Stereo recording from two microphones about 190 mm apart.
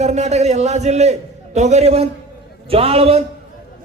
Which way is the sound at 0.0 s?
35° right (ahead or behind).